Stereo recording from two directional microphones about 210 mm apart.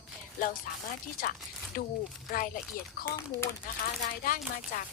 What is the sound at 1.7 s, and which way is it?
Speech, 40° left (ahead or behind).